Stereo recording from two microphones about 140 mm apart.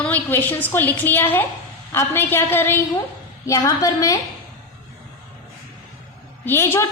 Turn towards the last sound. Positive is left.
turn(degrees=15)  # may be behind; listen again after turning